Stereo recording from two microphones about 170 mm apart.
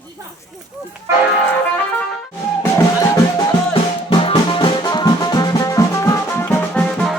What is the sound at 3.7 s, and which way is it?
Music, 30° left (ahead or behind).